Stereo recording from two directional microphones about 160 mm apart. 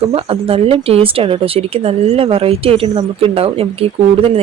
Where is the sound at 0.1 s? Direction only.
35° right (ahead or behind).